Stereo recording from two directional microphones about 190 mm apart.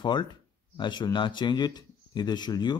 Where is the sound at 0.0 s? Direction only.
20° left (ahead or behind).